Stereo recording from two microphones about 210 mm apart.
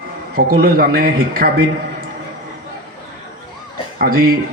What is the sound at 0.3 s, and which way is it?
Speech, 45° right (ahead or behind).